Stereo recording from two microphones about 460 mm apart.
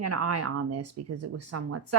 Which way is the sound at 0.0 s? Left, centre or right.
Right.